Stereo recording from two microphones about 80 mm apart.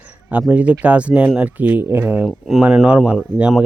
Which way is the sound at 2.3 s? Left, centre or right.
Centre.